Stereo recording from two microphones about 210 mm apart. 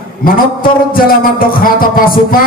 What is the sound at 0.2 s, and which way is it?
Speech, 45° left (ahead or behind).